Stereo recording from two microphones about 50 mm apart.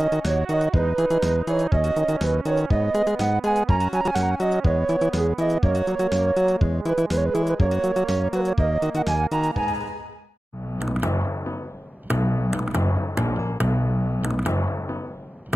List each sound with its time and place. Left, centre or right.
0.0 s music: centre
11.0 s music: left
12.4 s music: centre
12.7 s music: left